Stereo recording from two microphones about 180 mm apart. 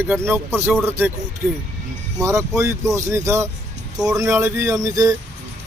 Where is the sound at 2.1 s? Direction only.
15° right (ahead or behind).